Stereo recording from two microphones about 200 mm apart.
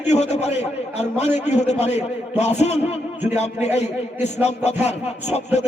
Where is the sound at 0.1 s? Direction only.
35° left (ahead or behind).